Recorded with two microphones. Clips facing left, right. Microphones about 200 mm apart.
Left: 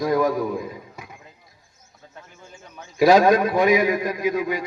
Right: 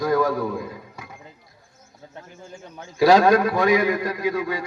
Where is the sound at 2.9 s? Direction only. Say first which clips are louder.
Even; 20° left (ahead or behind).